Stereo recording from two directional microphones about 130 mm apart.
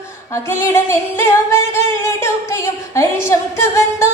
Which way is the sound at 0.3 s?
20° left (ahead or behind).